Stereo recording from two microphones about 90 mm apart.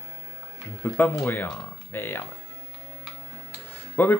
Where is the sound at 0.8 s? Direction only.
25° left (ahead or behind).